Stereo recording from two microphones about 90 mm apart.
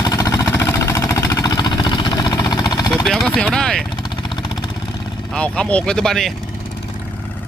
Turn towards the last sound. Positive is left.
turn(degrees=5)  # may be behind; listen again after turning